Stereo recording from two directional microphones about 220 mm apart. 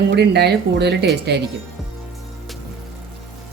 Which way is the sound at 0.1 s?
50° right (ahead or behind).